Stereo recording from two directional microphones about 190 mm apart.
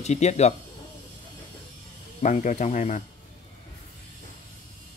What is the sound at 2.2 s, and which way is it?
Speech, 40° left (ahead or behind).